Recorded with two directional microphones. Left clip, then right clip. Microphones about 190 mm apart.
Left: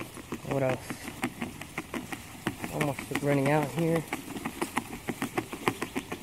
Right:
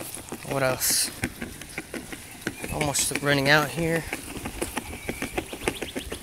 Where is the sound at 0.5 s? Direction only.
Centre (ahead or behind).